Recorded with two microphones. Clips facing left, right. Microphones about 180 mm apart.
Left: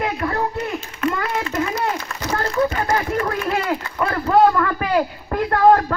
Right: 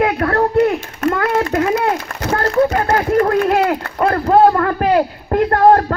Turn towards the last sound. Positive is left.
turn(degrees=-40)  # may be behind; listen again after turning